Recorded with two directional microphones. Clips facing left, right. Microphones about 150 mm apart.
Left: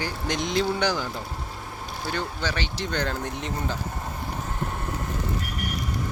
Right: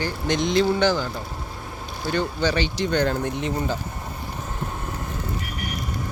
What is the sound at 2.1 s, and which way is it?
Speech, 5° left (ahead or behind).